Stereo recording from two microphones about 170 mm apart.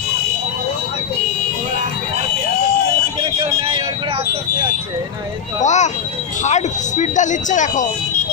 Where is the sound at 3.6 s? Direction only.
30° right (ahead or behind).